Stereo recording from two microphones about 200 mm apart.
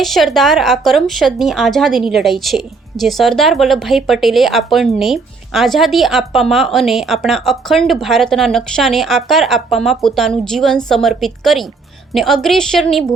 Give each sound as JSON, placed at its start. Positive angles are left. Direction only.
{"t": 0.0, "sound": "a woman's voice", "side_deg": 0}